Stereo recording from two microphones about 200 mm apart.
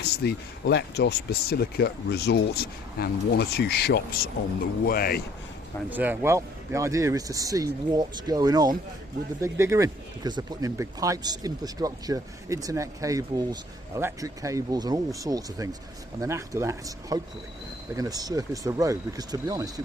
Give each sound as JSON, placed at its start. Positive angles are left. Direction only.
{"t": 0.0, "sound": "speech", "side_deg": 55}
{"t": 5.9, "sound": "speech", "side_deg": -10}